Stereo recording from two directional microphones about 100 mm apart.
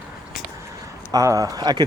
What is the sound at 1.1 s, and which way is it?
Speech, 35° right (ahead or behind).